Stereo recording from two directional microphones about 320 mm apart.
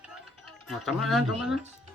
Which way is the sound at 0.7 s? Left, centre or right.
Centre.